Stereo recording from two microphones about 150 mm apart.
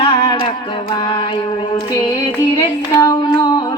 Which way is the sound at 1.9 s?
25° left (ahead or behind).